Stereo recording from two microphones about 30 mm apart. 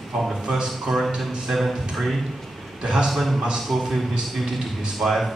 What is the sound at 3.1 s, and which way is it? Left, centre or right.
A man's voice, centre.